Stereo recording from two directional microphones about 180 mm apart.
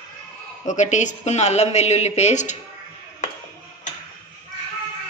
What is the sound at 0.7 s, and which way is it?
A woman's voice, 40° left (ahead or behind).